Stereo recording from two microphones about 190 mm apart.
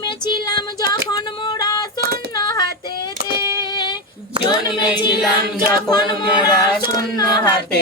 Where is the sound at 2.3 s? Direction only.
20° left (ahead or behind).